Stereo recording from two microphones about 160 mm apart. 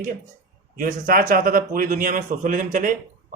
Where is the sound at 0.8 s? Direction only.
60° right (ahead or behind).